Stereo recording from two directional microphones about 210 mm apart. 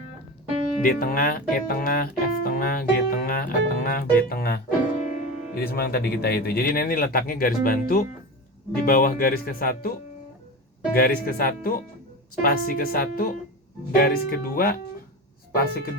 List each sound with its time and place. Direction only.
0.8 s speech: 45° left (ahead or behind)
10.9 s speech: 45° left (ahead or behind)